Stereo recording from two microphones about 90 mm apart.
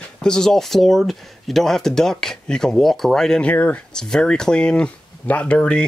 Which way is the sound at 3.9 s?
10° left (ahead or behind).